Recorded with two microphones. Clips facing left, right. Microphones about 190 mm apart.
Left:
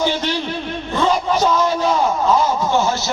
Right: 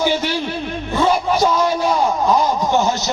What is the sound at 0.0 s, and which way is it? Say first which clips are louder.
A man's voice: right 1 dB; 10° right (ahead or behind).